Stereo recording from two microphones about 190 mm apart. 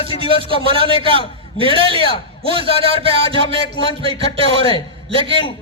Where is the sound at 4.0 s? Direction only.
30° right (ahead or behind).